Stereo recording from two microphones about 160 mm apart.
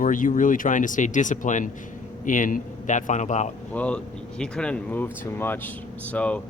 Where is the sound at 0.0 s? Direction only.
55° left (ahead or behind).